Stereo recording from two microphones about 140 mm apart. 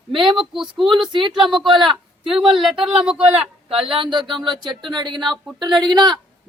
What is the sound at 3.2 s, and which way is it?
A woman's voice, 40° right (ahead or behind).